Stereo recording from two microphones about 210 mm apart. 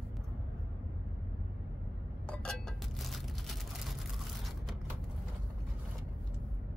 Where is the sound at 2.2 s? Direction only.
5° left (ahead or behind).